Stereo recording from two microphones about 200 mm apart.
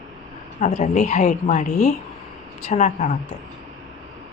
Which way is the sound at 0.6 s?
35° left (ahead or behind).